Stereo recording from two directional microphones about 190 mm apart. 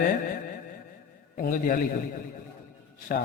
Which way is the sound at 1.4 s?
50° left (ahead or behind).